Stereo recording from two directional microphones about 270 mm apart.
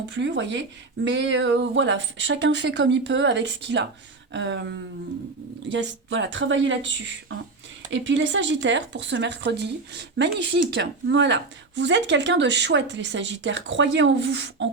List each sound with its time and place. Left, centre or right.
0.1 s speech: right